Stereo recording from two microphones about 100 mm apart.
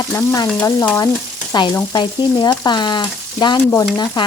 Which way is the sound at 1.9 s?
45° left (ahead or behind).